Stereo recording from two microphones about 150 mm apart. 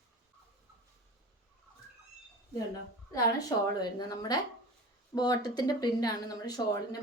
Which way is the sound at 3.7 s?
25° left (ahead or behind).